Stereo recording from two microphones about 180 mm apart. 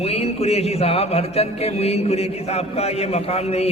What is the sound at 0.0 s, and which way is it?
Music, 35° left (ahead or behind).